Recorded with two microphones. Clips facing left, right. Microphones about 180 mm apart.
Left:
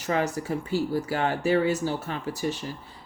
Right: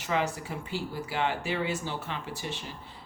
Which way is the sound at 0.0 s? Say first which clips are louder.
Left 4 dB; 40° left (ahead or behind).